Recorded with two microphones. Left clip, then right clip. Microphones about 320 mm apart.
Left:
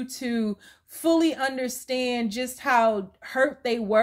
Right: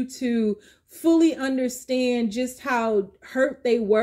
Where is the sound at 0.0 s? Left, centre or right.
Left.